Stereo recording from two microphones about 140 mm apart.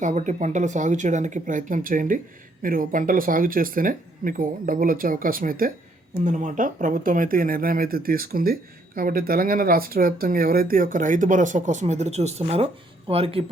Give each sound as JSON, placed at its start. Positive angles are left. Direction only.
{"t": 0.0, "sound": "speech", "side_deg": -60}
{"t": 6.2, "sound": "speech", "side_deg": -60}